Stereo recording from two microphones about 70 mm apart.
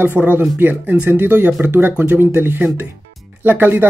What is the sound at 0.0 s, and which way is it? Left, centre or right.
Speech, right.